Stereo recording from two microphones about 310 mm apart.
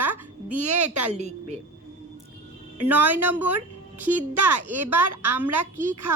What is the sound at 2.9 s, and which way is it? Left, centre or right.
Speech, centre.